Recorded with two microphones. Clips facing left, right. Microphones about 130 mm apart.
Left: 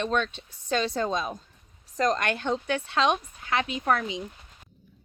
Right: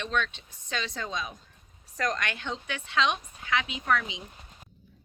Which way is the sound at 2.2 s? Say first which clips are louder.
Left 7 dB; 45° left (ahead or behind).